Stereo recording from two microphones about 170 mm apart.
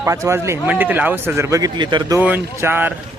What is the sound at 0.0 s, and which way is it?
Speech, 15° right (ahead or behind).